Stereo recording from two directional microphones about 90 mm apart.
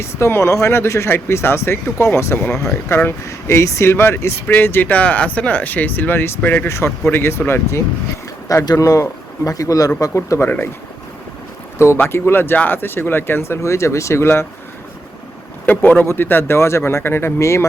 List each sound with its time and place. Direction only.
0.0 s speech: 30° left (ahead or behind)
8.4 s a man's voice: 45° left (ahead or behind)
11.9 s speech: 25° left (ahead or behind)
15.6 s speech: 20° left (ahead or behind)